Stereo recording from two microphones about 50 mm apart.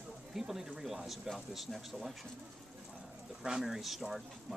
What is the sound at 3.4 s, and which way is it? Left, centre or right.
Speech, centre.